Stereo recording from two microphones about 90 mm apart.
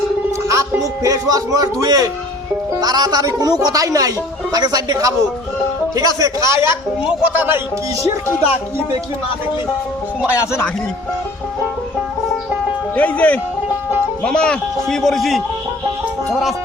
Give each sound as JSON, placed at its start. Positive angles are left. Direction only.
{"t": 0.4, "sound": "speech", "side_deg": -35}
{"t": 7.0, "sound": "a man's voice", "side_deg": -10}
{"t": 10.2, "sound": "speech", "side_deg": 30}
{"t": 13.0, "sound": "speech", "side_deg": 15}